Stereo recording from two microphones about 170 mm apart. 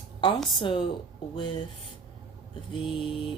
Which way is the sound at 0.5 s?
30° left (ahead or behind).